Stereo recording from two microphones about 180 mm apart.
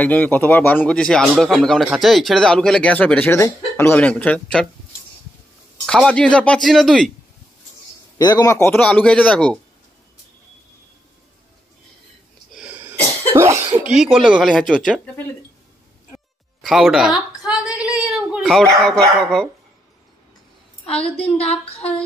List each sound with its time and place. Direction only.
0.0 s speech: 10° left (ahead or behind)
5.9 s speech: 5° left (ahead or behind)
8.2 s speech: 20° left (ahead or behind); by 9.6 s 5° left (ahead or behind)
12.5 s sneeze: 10° right (ahead or behind)
13.3 s cough: 15° right (ahead or behind)
13.8 s speech: 5° right (ahead or behind)
16.6 s a woman's voice: centre (ahead or behind)
20.8 s a woman's voice: 30° left (ahead or behind)